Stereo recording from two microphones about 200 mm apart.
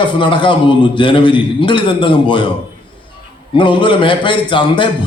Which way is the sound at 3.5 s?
25° left (ahead or behind).